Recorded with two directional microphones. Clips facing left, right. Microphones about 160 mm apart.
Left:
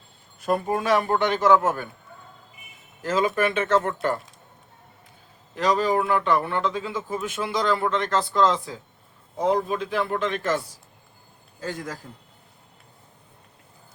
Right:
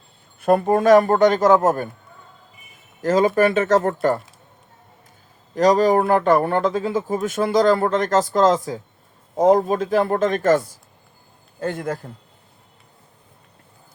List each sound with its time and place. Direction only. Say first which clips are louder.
0.3 s speech: right 7 dB; 55° right (ahead or behind); by 1.9 s 40° right (ahead or behind)
3.0 s speech: right 6 dB; 40° right (ahead or behind)
5.5 s speech: right 7 dB; 40° right (ahead or behind)
11.6 s a man's voice: right 7 dB; 60° right (ahead or behind)